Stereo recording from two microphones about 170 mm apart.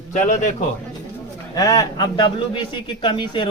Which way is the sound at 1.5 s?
20° left (ahead or behind).